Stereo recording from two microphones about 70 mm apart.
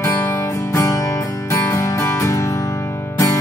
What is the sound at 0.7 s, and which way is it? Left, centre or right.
Music, left.